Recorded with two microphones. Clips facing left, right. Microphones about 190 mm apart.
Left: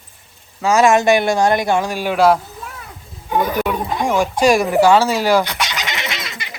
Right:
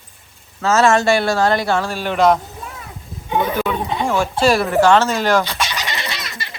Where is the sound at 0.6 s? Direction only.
15° left (ahead or behind).